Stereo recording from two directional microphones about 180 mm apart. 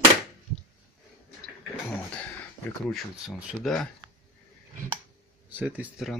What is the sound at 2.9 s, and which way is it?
Speech, centre (ahead or behind).